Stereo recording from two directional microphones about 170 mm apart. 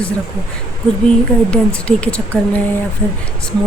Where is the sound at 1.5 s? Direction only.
5° left (ahead or behind).